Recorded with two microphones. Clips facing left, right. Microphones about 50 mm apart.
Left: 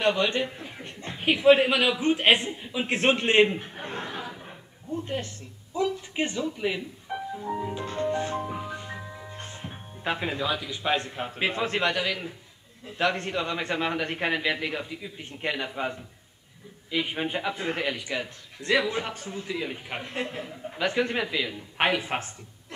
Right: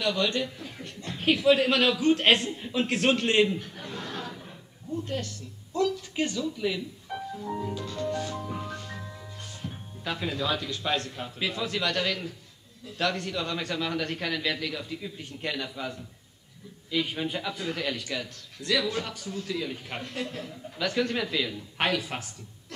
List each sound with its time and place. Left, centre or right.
0.0 s a man's voice: left; by 2.9 s centre
2.9 s a man's voice: left
4.1 s a sound: centre
4.9 s a man's voice: left
7.2 s music: centre
7.8 s music: left
8.5 s music: centre
9.3 s music: left
10.4 s a man's voice: centre; by 11.9 s left
11.9 s a man's voice: centre
12.8 s a man's voice: left
14.9 s a man's voice: centre
15.2 s a man's voice: left